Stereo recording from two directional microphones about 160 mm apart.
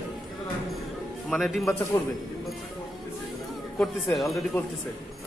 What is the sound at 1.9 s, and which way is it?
Speech, 25° left (ahead or behind).